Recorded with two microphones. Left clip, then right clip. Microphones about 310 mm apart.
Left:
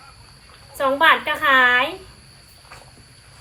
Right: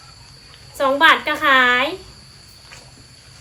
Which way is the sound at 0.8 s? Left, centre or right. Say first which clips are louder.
Right 2 dB; centre.